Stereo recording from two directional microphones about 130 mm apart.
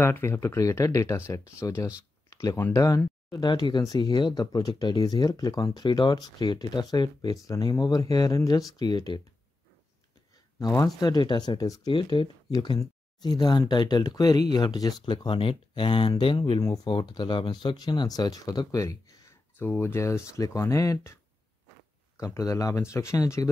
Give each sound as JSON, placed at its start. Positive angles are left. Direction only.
{"t": 0.0, "sound": "speech", "side_deg": 20}
{"t": 11.0, "sound": "speech", "side_deg": 35}
{"t": 11.9, "sound": "speech", "side_deg": 40}
{"t": 16.6, "sound": "speech", "side_deg": 25}